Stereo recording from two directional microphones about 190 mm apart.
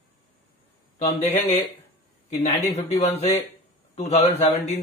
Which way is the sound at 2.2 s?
35° left (ahead or behind).